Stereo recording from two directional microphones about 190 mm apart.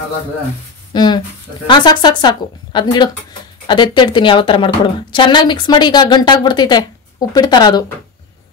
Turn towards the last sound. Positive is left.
turn(degrees=20)  # may be behind; listen again after turning